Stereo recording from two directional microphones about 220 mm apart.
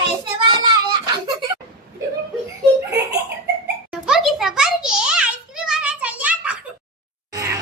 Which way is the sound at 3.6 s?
5° right (ahead or behind).